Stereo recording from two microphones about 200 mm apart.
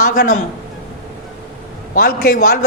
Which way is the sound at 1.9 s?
45° left (ahead or behind).